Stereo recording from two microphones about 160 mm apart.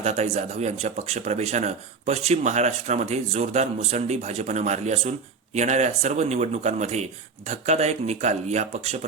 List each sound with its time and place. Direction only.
0.0 s speech: 45° right (ahead or behind)